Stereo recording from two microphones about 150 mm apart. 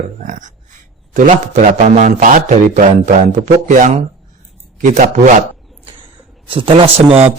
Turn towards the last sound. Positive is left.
turn(degrees=-40)  # may be behind; listen again after turning